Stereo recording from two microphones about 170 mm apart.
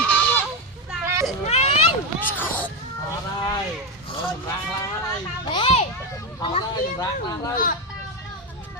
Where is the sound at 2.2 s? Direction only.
10° left (ahead or behind).